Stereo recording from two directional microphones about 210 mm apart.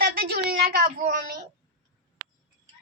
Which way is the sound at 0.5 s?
45° right (ahead or behind).